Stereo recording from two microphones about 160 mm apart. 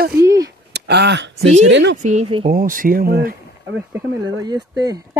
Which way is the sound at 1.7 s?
90° right.